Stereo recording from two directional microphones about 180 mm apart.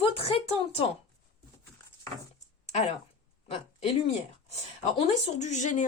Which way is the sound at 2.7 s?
35° left (ahead or behind).